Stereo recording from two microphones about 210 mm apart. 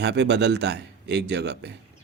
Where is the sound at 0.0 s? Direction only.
55° right (ahead or behind).